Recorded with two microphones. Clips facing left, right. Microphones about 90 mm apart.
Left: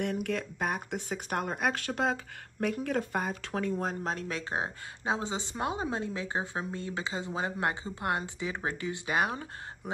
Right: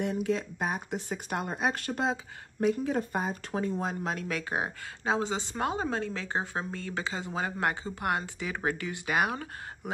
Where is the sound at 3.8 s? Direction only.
40° left (ahead or behind).